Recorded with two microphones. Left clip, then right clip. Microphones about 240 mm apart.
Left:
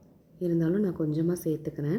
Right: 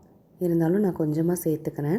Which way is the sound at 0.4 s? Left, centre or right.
Right.